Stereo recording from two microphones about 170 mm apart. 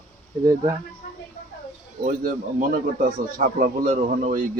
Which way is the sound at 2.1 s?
50° right (ahead or behind).